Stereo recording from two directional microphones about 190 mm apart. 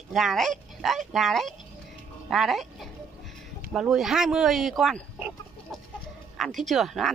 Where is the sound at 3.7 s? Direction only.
Centre (ahead or behind).